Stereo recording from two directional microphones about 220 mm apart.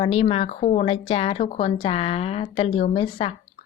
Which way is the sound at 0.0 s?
25° left (ahead or behind).